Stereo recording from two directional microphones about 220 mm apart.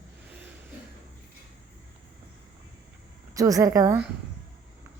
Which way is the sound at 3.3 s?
15° right (ahead or behind).